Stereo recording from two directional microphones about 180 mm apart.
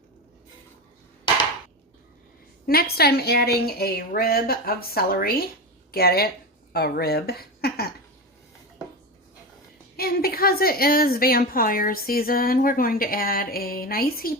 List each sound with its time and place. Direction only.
2.6 s a woman's voice: 60° left (ahead or behind)
10.0 s a woman's voice: 55° left (ahead or behind)